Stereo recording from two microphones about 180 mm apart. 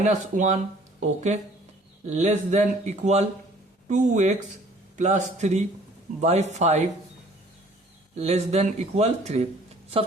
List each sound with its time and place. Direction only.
0.0 s speech: 40° right (ahead or behind)
8.2 s speech: 35° right (ahead or behind)